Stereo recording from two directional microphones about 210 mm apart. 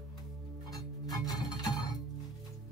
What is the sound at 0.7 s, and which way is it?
Music, 20° left (ahead or behind).